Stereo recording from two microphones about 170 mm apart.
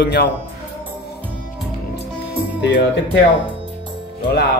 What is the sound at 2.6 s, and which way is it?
Speech, 90° left.